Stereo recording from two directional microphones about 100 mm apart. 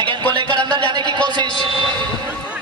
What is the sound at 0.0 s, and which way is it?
Music, 50° right (ahead or behind).